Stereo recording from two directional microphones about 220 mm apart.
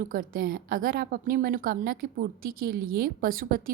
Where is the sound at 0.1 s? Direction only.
40° right (ahead or behind).